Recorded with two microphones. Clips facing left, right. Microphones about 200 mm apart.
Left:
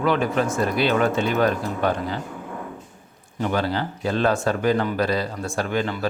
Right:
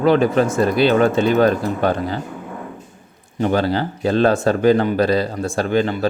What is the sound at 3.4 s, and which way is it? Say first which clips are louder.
Speech: right 5 dB; 30° right (ahead or behind).